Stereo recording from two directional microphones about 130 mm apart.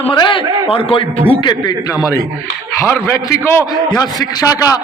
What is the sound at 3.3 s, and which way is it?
Speech, 20° left (ahead or behind).